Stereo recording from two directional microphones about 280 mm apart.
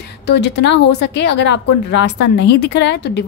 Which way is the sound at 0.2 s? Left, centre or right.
Left.